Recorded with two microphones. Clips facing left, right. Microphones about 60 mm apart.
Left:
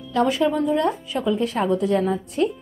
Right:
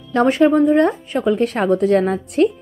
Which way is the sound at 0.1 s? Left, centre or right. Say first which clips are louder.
Right 6 dB; right.